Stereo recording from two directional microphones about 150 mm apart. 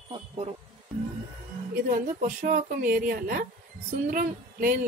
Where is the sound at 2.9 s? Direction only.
75° right (ahead or behind).